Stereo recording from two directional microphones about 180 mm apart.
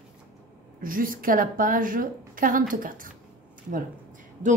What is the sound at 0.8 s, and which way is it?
A woman's voice, 50° right (ahead or behind).